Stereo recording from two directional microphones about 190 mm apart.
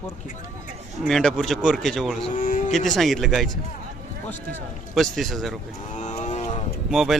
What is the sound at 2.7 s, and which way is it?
Speech, centre (ahead or behind).